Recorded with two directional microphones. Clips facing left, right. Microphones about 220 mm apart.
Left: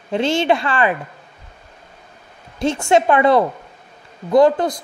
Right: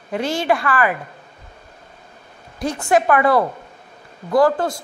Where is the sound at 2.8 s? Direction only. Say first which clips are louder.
Left 1 dB; 25° left (ahead or behind).